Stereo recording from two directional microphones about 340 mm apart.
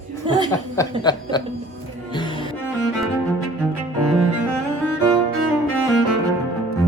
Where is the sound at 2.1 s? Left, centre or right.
Centre.